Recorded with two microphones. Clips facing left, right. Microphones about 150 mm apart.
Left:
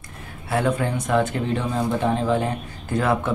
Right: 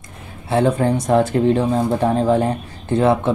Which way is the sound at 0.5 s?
30° right (ahead or behind).